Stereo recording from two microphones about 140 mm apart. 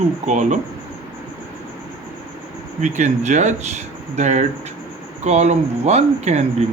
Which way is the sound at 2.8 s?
60° right (ahead or behind).